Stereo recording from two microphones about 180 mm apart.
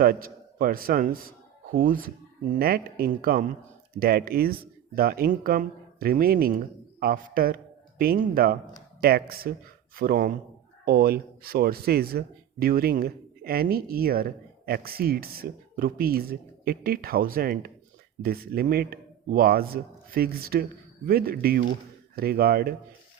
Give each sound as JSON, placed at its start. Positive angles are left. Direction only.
{"t": 0.0, "sound": "a man's voice", "side_deg": -55}